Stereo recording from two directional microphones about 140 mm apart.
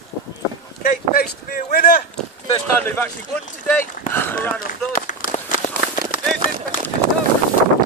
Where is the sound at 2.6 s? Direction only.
15° left (ahead or behind).